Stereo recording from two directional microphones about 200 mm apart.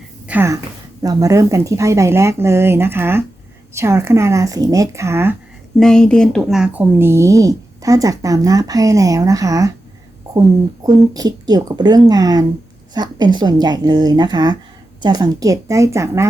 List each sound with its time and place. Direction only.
0.3 s speech: 10° right (ahead or behind)
5.8 s speech: 5° left (ahead or behind); by 9.7 s 15° right (ahead or behind)
10.8 s speech: 20° right (ahead or behind)